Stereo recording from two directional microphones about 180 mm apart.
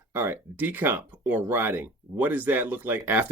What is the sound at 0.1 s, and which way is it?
Speech, 10° right (ahead or behind).